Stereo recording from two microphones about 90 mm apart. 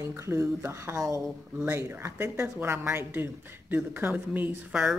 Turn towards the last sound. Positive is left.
turn(degrees=-20)  # may be behind; listen again after turning